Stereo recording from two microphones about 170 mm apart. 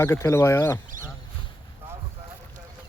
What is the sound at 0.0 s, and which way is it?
Speech, 15° left (ahead or behind).